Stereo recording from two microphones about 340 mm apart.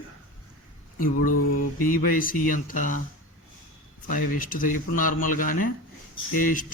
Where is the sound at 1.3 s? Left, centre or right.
Left.